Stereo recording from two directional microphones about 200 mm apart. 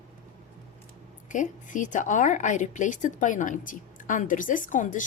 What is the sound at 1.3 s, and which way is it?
A woman's voice, 40° left (ahead or behind).